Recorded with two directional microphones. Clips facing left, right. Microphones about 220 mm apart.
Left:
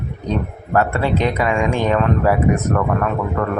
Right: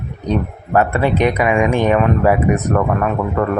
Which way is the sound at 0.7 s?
15° right (ahead or behind).